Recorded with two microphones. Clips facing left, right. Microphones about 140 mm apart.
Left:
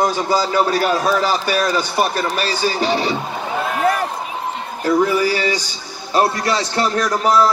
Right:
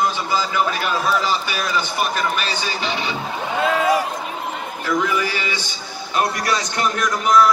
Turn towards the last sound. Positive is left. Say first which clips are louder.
# left 1 dB
turn(degrees=35)  # may be behind; listen again after turning